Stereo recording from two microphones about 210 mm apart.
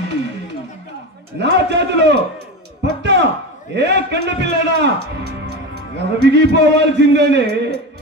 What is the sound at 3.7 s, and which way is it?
A man's voice, 55° right (ahead or behind).